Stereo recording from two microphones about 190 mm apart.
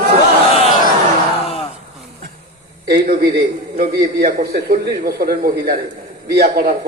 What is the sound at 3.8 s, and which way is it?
A man's voice, 55° right (ahead or behind).